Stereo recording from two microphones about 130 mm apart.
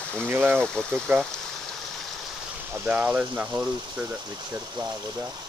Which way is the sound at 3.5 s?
30° right (ahead or behind).